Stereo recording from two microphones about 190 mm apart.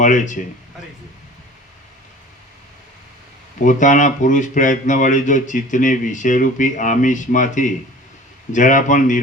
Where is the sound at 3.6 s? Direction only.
40° left (ahead or behind).